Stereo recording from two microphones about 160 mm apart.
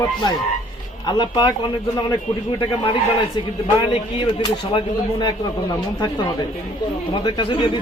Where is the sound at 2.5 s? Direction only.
30° left (ahead or behind).